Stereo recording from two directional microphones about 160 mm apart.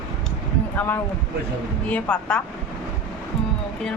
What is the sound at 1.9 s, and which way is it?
Speech, 5° left (ahead or behind).